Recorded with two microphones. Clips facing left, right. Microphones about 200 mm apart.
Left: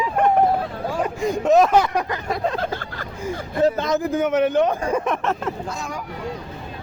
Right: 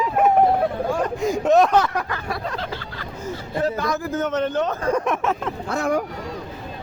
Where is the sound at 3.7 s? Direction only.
20° left (ahead or behind); by 5.5 s centre (ahead or behind).